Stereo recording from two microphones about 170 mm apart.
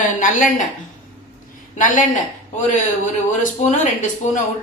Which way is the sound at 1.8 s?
50° left (ahead or behind).